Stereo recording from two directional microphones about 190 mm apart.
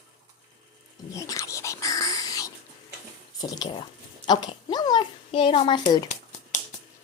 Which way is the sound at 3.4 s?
20° left (ahead or behind).